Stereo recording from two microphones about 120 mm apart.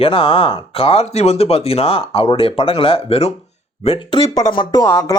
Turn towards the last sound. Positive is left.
turn(degrees=25)  # may be behind; listen again after turning